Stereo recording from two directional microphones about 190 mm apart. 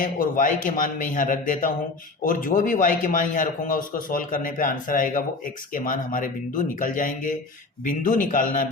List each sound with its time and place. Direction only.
0.0 s a man's voice: 45° left (ahead or behind)